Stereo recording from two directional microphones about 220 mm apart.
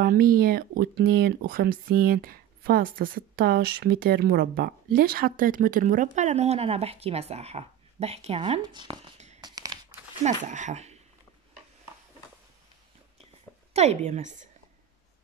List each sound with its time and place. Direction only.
0.0 s speech: 45° right (ahead or behind); by 9.4 s 25° right (ahead or behind)
9.4 s a sound: 20° right (ahead or behind)
10.2 s speech: 35° right (ahead or behind)
13.7 s speech: 30° right (ahead or behind)